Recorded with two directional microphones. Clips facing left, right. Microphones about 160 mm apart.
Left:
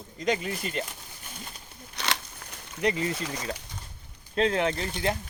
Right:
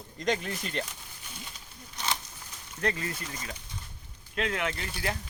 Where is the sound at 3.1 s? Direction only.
75° left (ahead or behind).